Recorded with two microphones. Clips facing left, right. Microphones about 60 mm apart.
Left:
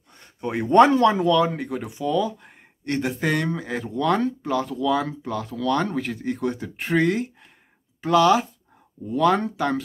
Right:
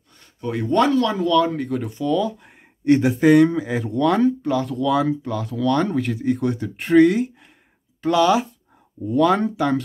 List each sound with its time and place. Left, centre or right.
0.2 s speech: left; by 9.8 s centre